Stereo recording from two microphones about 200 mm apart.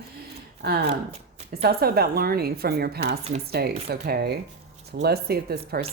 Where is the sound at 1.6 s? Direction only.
50° right (ahead or behind).